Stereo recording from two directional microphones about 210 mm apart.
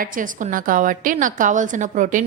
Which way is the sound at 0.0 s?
40° right (ahead or behind).